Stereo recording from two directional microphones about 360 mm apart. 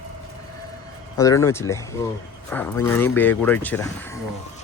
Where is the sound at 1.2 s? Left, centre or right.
Centre.